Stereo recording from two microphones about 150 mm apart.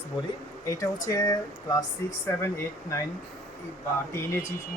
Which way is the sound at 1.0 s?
25° left (ahead or behind).